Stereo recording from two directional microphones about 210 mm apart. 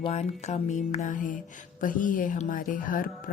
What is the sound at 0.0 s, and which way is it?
Music, 30° left (ahead or behind).